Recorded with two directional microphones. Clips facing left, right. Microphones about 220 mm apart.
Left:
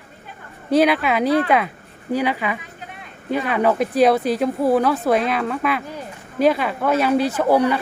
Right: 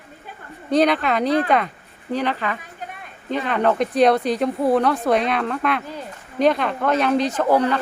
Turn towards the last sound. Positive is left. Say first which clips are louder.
# left 1 dB
turn(degrees=10)  # may be behind; listen again after turning